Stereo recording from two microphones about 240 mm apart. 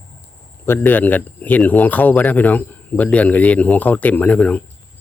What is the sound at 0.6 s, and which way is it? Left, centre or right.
Speech, centre.